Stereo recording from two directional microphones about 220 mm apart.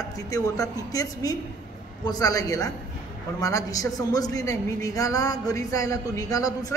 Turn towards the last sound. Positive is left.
turn(degrees=15)  # may be behind; listen again after turning